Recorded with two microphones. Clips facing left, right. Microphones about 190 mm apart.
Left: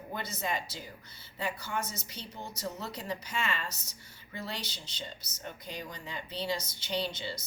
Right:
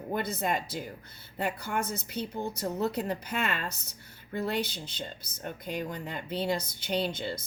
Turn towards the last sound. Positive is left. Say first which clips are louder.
# right 4 dB
turn(degrees=-55)  # may be behind; listen again after turning